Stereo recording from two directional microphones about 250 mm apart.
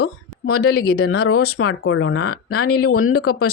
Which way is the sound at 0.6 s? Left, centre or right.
Left.